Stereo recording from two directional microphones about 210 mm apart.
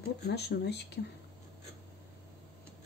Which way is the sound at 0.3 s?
50° left (ahead or behind).